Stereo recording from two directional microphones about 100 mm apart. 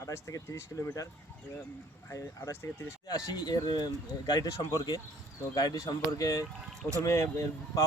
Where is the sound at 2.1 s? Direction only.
30° left (ahead or behind).